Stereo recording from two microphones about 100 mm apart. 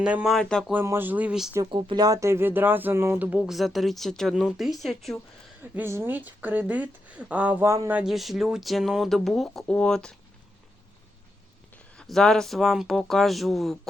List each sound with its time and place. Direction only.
0.0 s speech: 10° right (ahead or behind)
0.3 s speech: 5° left (ahead or behind)
0.9 s speech: 20° right (ahead or behind)
1.7 s speech: 55° right (ahead or behind)
2.0 s speech: 30° right (ahead or behind); by 5.2 s centre (ahead or behind)
5.7 s speech: 20° right (ahead or behind)
7.6 s speech: 25° right (ahead or behind)
7.9 s speech: 5° right (ahead or behind)
11.9 s speech: 5° left (ahead or behind)